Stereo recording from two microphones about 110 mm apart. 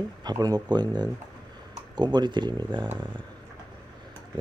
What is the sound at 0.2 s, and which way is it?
Speech, 35° right (ahead or behind).